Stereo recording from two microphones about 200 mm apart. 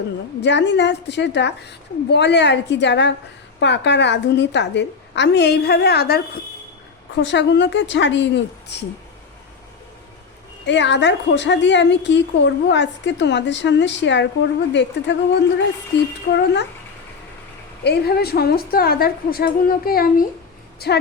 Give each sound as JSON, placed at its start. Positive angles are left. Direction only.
{"t": 0.4, "sound": "a woman's voice", "side_deg": 60}
{"t": 10.7, "sound": "a woman's voice", "side_deg": 65}
{"t": 17.8, "sound": "a woman's voice", "side_deg": 55}